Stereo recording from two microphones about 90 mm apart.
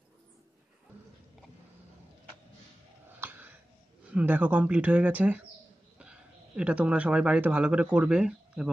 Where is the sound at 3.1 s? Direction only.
20° right (ahead or behind).